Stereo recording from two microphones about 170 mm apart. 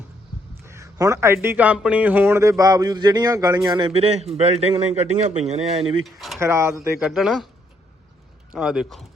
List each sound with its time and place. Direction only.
0.6 s speech: 15° right (ahead or behind); by 5.8 s 40° right (ahead or behind)
6.1 s a man's voice: centre (ahead or behind)
6.4 s speech: 15° right (ahead or behind)
7.0 s a man's voice: centre (ahead or behind)
8.5 s a man's voice: 5° right (ahead or behind)